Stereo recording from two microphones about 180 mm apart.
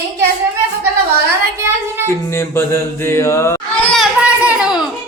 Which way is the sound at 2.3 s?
15° left (ahead or behind).